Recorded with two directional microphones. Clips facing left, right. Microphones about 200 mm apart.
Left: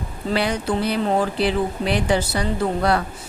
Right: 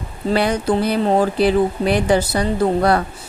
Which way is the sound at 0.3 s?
45° right (ahead or behind).